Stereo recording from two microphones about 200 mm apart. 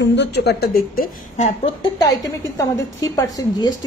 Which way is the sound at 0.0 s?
60° left (ahead or behind).